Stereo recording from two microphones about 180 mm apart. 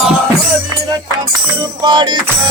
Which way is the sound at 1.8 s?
25° right (ahead or behind).